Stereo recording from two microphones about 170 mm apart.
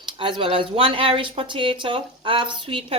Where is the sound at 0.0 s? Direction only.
30° right (ahead or behind).